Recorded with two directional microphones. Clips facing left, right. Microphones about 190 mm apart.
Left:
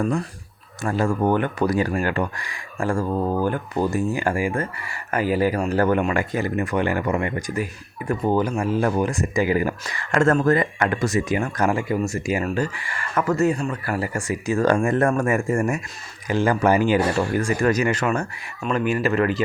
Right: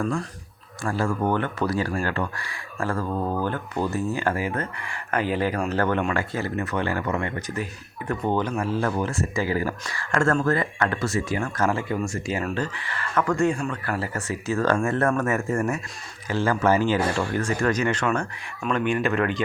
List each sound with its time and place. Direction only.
0.9 s speech: 20° left (ahead or behind)